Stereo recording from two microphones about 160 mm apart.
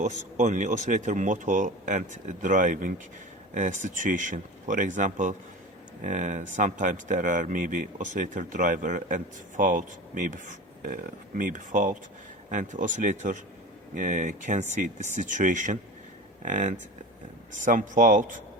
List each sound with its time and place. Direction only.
0.3 s speech: 50° right (ahead or behind)